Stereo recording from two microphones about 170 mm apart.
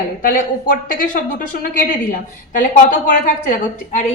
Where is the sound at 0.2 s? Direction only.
60° left (ahead or behind).